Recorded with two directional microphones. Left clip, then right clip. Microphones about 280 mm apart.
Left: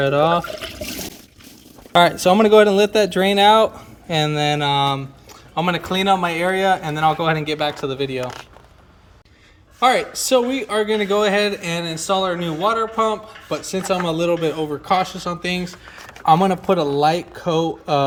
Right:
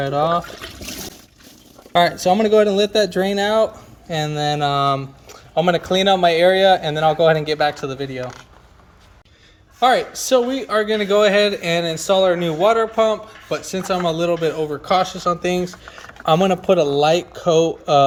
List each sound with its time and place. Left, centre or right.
0.0 s speech: centre
1.9 s speech: centre
9.8 s speech: centre